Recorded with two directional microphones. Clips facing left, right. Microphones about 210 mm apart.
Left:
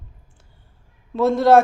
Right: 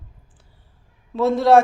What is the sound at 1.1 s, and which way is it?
Speech, centre (ahead or behind).